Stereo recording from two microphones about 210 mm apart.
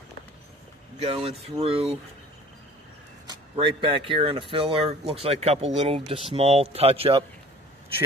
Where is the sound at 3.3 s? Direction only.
25° right (ahead or behind).